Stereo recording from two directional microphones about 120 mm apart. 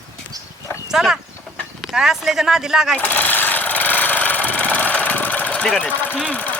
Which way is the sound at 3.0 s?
15° left (ahead or behind).